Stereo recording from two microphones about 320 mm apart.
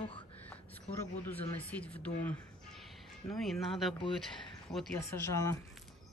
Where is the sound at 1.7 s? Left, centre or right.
Centre.